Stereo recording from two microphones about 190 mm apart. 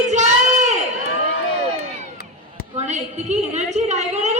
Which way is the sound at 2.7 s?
40° right (ahead or behind).